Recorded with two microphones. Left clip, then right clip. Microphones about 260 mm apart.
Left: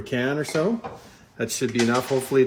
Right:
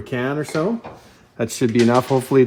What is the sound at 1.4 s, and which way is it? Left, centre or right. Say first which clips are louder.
Speech: right 6 dB; right.